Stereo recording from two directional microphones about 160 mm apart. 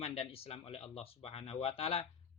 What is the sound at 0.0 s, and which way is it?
Speech, 40° left (ahead or behind).